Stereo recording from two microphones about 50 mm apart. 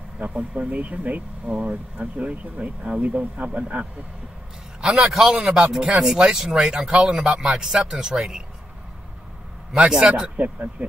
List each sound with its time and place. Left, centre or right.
0.2 s speech: right
5.1 s speech: centre
9.8 s speech: centre